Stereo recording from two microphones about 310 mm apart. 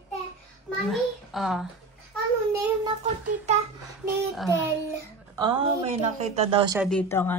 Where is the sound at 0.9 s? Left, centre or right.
Centre.